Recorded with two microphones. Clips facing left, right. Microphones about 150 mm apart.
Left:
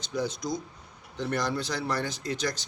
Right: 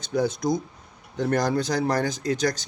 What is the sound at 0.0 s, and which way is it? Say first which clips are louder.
Speech: right 7 dB; 50° right (ahead or behind).